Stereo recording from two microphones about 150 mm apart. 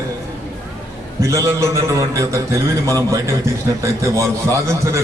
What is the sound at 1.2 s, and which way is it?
A man's voice, 20° right (ahead or behind).